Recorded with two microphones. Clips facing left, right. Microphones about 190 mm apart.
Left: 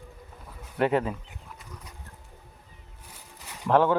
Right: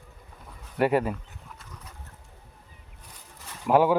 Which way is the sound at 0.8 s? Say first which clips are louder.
Right 1 dB; 10° right (ahead or behind).